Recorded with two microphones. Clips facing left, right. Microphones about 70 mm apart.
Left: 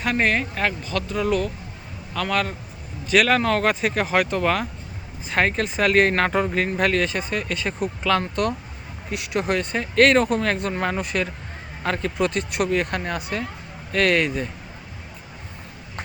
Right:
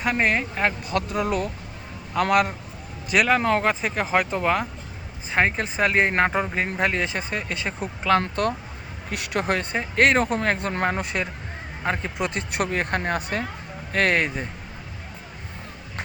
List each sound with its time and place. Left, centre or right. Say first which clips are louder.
0.0 s speech: left 1 dB; centre
0.9 s speech: left 1 dB; right
2.3 s speech: right 3 dB; centre
3.7 s speech: left 1 dB; centre; by 8.2 s right
9.0 s speech: left 1 dB; right
9.7 s speech: left 3 dB; right
11.0 s speech: left 2 dB; right